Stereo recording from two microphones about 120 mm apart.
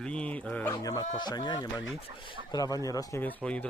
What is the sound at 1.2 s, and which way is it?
Speech, 35° left (ahead or behind).